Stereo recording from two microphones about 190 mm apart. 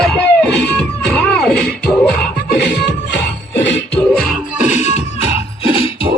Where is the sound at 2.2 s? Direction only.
60° left (ahead or behind).